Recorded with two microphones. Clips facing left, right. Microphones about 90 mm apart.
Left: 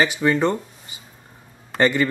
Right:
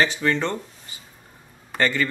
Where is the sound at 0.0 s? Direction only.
10° left (ahead or behind).